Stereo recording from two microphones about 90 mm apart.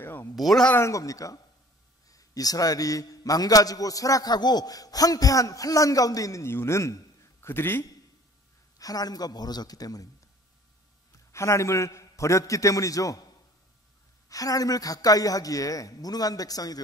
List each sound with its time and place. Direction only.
0.0 s a sound: 25° left (ahead or behind)
0.4 s speech: centre (ahead or behind)
0.7 s a man's voice: 35° left (ahead or behind)
8.7 s a man's voice: 45° left (ahead or behind)
11.3 s a man's voice: 35° left (ahead or behind)
14.3 s a man's voice: 40° left (ahead or behind)